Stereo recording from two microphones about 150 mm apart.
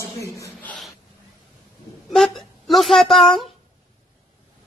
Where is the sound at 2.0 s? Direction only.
Centre (ahead or behind).